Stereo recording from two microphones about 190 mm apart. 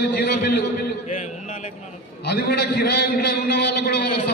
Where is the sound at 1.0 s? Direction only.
40° left (ahead or behind).